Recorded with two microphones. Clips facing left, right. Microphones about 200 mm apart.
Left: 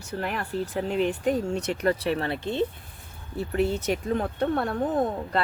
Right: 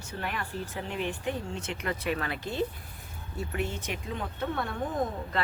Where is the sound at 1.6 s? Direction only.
40° left (ahead or behind).